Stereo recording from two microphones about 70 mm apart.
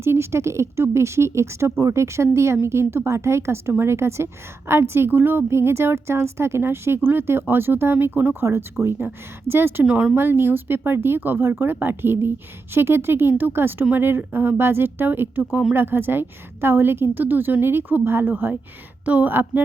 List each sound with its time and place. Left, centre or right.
0.0 s a woman's voice: right
9.8 s speech: centre
10.2 s a woman's voice: right